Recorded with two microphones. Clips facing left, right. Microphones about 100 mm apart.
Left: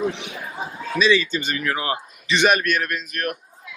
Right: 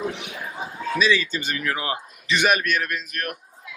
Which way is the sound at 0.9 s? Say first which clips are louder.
Left 3 dB; 5° right (ahead or behind).